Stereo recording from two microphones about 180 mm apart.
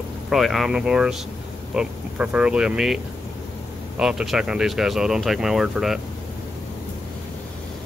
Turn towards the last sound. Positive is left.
turn(degrees=-5)  # may be behind; listen again after turning